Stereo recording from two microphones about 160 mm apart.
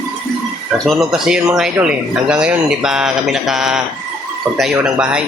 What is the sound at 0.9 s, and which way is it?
Speech, centre (ahead or behind).